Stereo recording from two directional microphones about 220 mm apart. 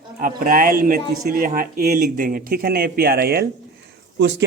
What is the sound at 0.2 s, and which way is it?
Speech, 40° right (ahead or behind).